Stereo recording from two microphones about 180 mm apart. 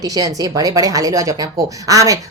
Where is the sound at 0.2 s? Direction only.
20° right (ahead or behind).